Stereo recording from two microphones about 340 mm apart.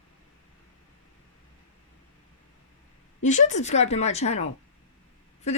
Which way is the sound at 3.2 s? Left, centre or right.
Left.